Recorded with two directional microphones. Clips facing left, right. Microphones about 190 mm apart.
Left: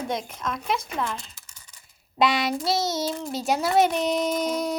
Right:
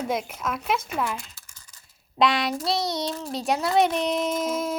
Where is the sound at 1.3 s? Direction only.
20° left (ahead or behind).